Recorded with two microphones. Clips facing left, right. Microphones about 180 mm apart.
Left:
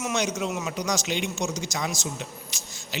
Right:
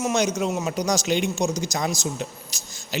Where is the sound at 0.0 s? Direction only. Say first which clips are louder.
Right 5 dB; 40° right (ahead or behind).